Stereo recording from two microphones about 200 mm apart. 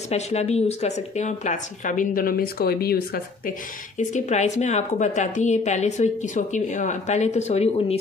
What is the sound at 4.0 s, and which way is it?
A woman's voice, 35° left (ahead or behind).